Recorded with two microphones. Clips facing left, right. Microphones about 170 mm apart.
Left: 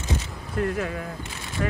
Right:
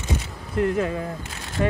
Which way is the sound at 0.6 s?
25° right (ahead or behind).